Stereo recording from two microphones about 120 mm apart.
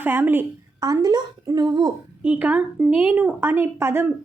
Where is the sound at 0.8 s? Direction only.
30° right (ahead or behind).